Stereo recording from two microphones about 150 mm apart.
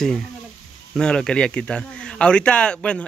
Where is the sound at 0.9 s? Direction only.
5° left (ahead or behind).